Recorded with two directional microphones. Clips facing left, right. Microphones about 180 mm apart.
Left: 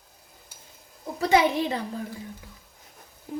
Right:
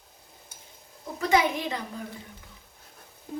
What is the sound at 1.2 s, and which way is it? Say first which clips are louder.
Speech: left 3 dB; 30° left (ahead or behind).